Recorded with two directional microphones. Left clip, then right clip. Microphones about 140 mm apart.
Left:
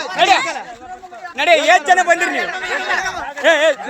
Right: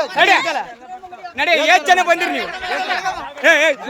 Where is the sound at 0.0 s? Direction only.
45° right (ahead or behind).